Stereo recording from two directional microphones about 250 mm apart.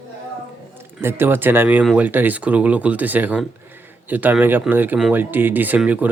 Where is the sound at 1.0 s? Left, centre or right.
Centre.